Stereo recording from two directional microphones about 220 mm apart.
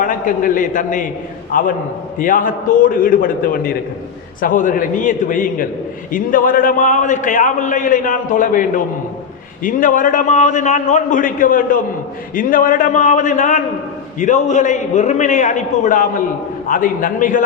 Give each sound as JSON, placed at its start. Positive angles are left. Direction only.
{"t": 0.0, "sound": "a man's voice", "side_deg": 40}